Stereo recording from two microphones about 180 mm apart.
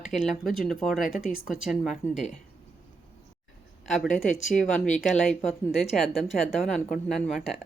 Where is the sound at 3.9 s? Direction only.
Centre (ahead or behind).